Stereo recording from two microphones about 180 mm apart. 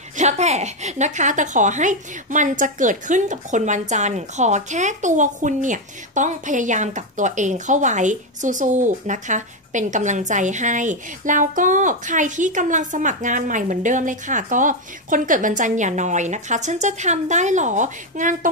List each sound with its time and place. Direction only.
0.2 s a woman's voice: 40° right (ahead or behind)